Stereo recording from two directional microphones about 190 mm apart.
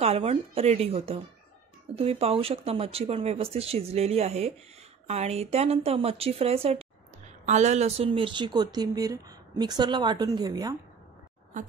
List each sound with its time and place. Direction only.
0.0 s a woman's voice: 35° right (ahead or behind)